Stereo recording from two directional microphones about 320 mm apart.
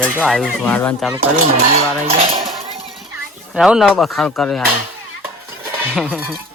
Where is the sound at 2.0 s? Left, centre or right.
Centre.